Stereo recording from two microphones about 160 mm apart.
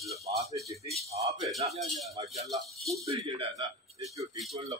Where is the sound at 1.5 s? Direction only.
45° right (ahead or behind).